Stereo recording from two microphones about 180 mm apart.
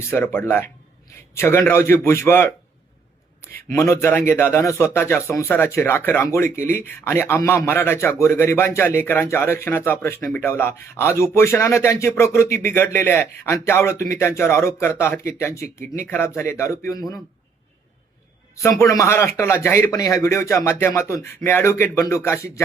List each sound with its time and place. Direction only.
0.0 s speech: 15° left (ahead or behind)
3.7 s speech: 15° left (ahead or behind)
18.5 s speech: 15° left (ahead or behind)